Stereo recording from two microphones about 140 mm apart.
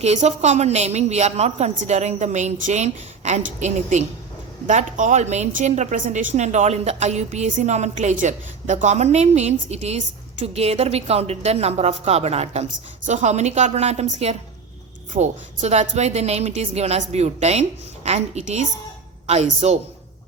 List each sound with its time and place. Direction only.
0.0 s a woman's voice: 50° right (ahead or behind)